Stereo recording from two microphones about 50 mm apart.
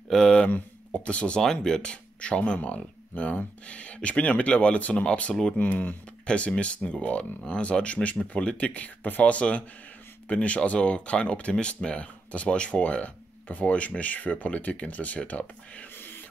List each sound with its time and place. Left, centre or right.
0.1 s a sound: centre
0.5 s speech: left
1.4 s speech: centre
5.3 s speech: centre
5.6 s speech: left
6.2 s speech: left
16.0 s a sound: left